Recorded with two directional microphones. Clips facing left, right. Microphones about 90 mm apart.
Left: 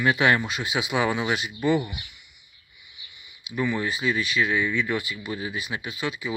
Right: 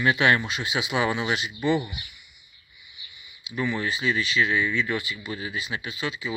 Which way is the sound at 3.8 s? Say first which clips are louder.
Even; 45° left (ahead or behind).